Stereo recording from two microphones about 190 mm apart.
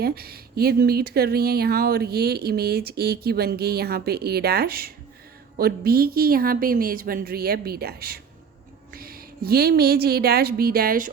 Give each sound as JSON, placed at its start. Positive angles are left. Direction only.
{"t": 0.0, "sound": "a woman's voice", "side_deg": -55}